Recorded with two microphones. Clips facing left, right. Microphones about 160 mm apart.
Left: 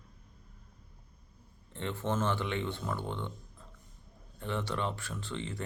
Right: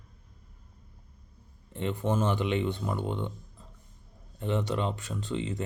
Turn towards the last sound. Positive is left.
turn(degrees=-20)  # may be behind; listen again after turning